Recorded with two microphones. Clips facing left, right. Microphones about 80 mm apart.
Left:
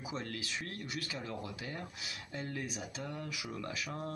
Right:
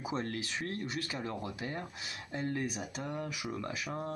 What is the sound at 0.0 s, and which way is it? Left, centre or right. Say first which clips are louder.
Speech: right 5 dB; right.